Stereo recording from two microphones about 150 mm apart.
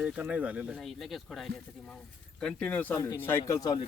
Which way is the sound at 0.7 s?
Centre (ahead or behind).